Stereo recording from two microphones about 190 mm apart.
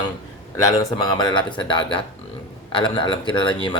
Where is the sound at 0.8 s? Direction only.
25° left (ahead or behind).